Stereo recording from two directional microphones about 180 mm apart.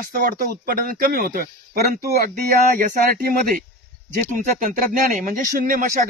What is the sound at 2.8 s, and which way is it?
Speech, 55° right (ahead or behind).